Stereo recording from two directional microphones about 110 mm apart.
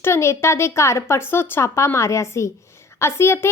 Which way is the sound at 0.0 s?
25° left (ahead or behind).